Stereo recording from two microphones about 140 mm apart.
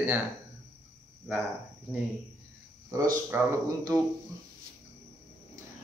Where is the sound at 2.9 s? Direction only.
20° right (ahead or behind).